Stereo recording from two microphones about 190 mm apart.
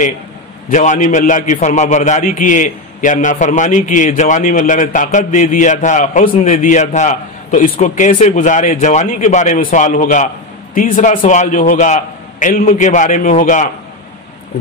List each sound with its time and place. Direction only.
0.7 s a man's voice: 40° left (ahead or behind)